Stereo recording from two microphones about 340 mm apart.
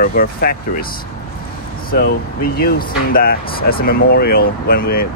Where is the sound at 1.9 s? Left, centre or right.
Left.